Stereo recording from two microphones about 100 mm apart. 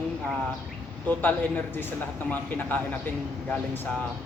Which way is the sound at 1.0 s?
20° left (ahead or behind).